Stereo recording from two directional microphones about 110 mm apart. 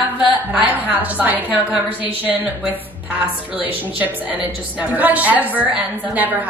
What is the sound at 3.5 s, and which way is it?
A woman's voice, 15° right (ahead or behind).